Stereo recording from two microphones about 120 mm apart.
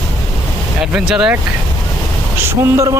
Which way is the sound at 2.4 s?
25° right (ahead or behind).